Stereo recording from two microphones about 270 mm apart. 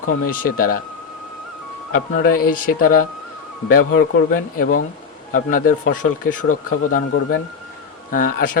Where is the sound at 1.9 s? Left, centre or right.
Left.